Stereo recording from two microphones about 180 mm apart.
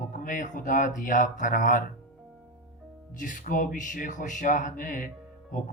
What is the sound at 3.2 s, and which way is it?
Speech, 45° left (ahead or behind).